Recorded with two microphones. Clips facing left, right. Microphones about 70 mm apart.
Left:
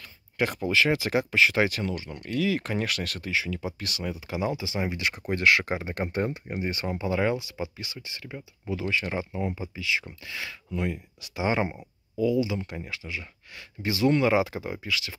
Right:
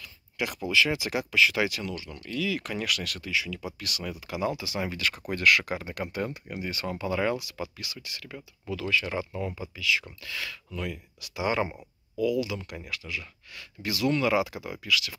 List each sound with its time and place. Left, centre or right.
0.4 s speech: left